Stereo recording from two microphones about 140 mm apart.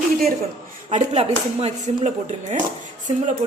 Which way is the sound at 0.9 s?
50° right (ahead or behind).